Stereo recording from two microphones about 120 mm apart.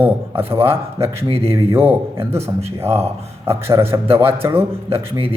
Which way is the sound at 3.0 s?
20° right (ahead or behind).